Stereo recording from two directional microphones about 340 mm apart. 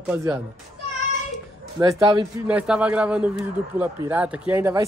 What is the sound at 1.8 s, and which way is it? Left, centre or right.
Speech, centre.